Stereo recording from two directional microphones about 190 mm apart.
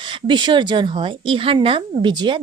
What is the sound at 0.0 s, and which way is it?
Speech, 25° right (ahead or behind).